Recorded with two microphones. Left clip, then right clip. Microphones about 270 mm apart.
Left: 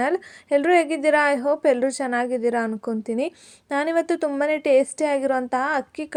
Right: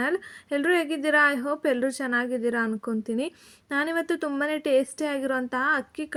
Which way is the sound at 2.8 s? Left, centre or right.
Centre.